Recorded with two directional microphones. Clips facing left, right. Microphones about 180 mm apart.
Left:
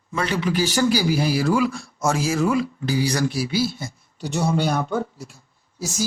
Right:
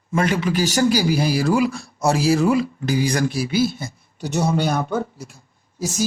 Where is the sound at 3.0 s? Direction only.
50° right (ahead or behind).